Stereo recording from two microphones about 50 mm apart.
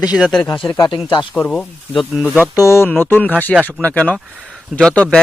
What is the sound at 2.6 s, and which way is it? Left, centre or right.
Speech, left.